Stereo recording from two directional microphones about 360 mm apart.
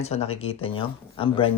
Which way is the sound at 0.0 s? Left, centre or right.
Centre.